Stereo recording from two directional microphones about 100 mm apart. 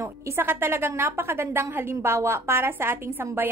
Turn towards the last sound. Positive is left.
turn(degrees=-25)  # may be behind; listen again after turning